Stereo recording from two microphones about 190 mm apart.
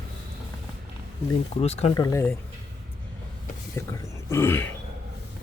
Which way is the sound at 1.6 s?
35° left (ahead or behind).